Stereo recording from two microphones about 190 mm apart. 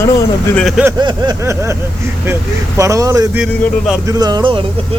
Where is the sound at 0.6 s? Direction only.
Centre (ahead or behind).